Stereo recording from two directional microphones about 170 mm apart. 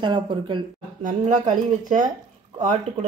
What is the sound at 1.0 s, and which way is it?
Speech, 50° right (ahead or behind).